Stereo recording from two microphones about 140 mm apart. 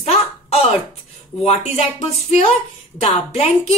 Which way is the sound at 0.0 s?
45° left (ahead or behind).